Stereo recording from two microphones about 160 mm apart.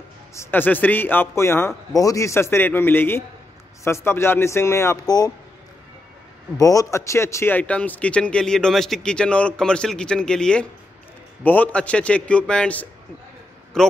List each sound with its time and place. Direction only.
0.3 s speech: 15° left (ahead or behind)
6.5 s speech: 20° left (ahead or behind); by 13.9 s 5° left (ahead or behind)